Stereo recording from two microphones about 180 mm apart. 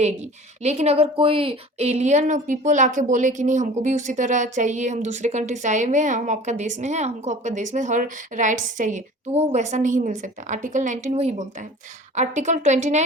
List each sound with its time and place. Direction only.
0.0 s a woman's voice: 40° right (ahead or behind)